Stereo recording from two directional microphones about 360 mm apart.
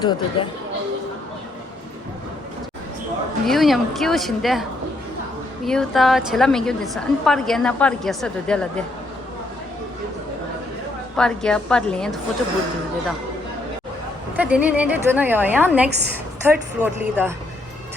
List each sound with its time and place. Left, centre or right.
0.0 s speech: centre
3.4 s a woman's voice: centre
5.6 s a woman's voice: centre
11.2 s a woman's voice: centre
14.3 s a woman's voice: centre
15.9 s a woman's voice: right
16.5 s a woman's voice: centre